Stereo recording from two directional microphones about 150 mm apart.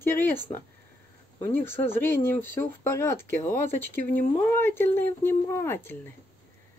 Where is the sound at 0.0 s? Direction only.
15° left (ahead or behind).